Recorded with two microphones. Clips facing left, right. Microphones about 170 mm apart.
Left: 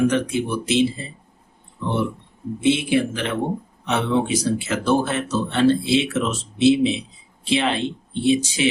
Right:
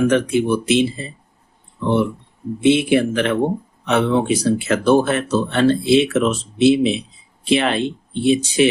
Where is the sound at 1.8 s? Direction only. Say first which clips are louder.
Right 5 dB; 60° right (ahead or behind).